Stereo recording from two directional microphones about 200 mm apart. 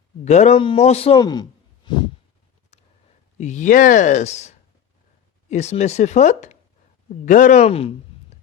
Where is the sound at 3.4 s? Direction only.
35° left (ahead or behind).